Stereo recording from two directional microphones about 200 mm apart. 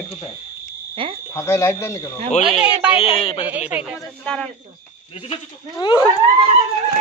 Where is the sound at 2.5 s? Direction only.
5° right (ahead or behind).